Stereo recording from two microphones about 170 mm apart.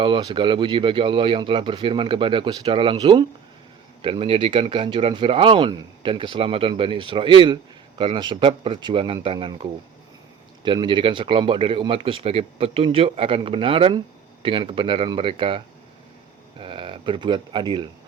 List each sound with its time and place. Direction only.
0.0 s speech: 30° right (ahead or behind)